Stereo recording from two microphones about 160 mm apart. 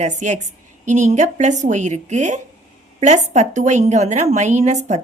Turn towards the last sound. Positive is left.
turn(degrees=-45)  # may be behind; listen again after turning